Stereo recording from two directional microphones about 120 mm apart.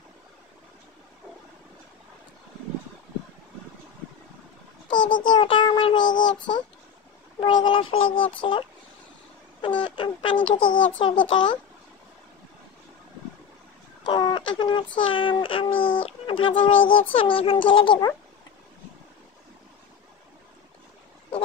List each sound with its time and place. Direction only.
4.8 s a sound: 40° left (ahead or behind)
5.2 s child singing: 45° left (ahead or behind)
7.3 s a child's voice: 45° left (ahead or behind)
9.8 s speech: 40° left (ahead or behind)
11.2 s child singing: 40° left (ahead or behind)
14.0 s a sound: 40° left (ahead or behind)
15.0 s a child's voice: 45° left (ahead or behind)